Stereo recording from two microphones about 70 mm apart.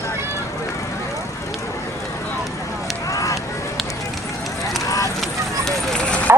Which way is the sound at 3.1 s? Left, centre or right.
Left.